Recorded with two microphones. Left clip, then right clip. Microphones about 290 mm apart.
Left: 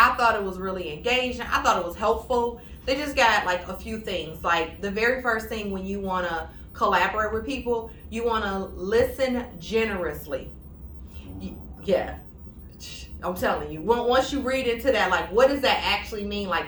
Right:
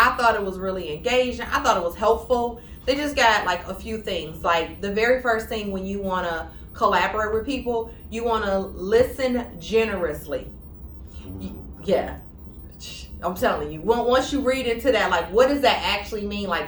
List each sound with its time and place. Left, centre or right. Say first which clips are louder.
0.0 s speech: right 1 dB; centre
11.9 s speech: right 2 dB; centre